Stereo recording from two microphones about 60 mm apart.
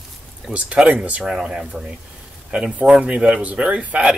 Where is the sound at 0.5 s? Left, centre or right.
Right.